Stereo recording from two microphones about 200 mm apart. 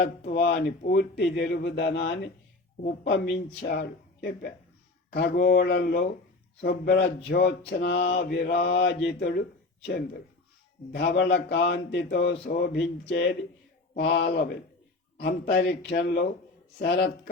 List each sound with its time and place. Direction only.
0.0 s mantra: 50° left (ahead or behind)
2.8 s a man's voice: 55° left (ahead or behind)
7.3 s mantra: 50° left (ahead or behind)
10.9 s a man's voice: 55° left (ahead or behind)
13.9 s mantra: 55° left (ahead or behind)